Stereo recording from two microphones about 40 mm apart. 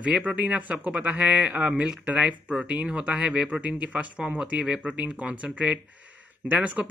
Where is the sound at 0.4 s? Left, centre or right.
Right.